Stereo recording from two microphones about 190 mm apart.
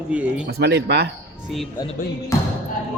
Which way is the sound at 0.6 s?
60° right (ahead or behind).